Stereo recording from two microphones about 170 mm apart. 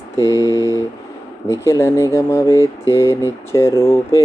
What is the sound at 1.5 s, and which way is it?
Speech, 20° left (ahead or behind).